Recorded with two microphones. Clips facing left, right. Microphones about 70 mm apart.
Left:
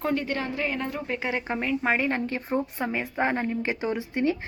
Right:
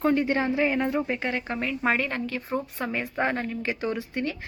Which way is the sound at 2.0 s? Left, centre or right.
Left.